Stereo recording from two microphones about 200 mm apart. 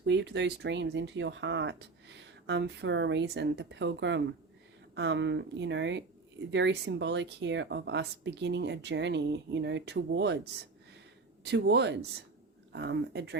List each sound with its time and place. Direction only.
0.0 s speech: 60° right (ahead or behind)